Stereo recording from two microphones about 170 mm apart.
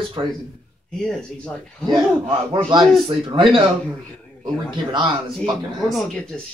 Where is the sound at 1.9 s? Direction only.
25° right (ahead or behind).